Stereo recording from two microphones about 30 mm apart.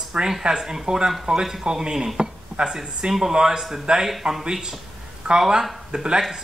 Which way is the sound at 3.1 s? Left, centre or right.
Centre.